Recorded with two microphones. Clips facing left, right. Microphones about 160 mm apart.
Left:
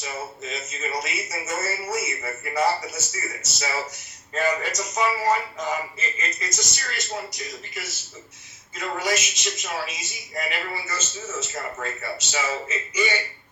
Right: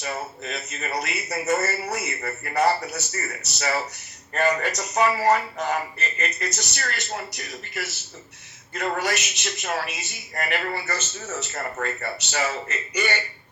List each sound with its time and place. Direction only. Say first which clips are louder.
0.0 s speech: right 2 dB; 65° right (ahead or behind)